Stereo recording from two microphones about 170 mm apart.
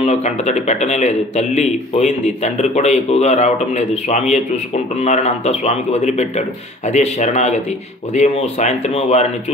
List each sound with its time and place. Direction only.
0.0 s a man's voice: 40° left (ahead or behind)